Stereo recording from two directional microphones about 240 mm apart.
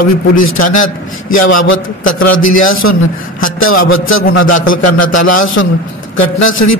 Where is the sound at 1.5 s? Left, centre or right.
Left.